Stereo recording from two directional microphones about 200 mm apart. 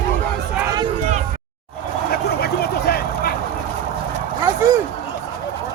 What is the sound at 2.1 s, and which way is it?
Vehicle, 50° left (ahead or behind).